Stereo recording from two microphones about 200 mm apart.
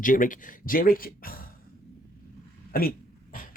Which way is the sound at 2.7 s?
45° left (ahead or behind).